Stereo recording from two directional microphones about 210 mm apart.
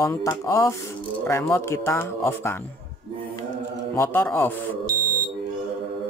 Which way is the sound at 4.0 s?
10° left (ahead or behind).